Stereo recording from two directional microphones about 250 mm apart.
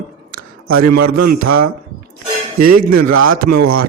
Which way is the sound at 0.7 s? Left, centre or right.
Right.